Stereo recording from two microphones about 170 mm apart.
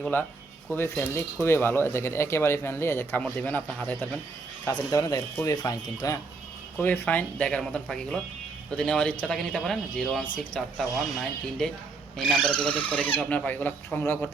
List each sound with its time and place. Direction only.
0.0 s speech: 10° left (ahead or behind)
4.6 s speech: 20° left (ahead or behind)
6.7 s speech: 10° left (ahead or behind)
12.1 s speech: 5° left (ahead or behind)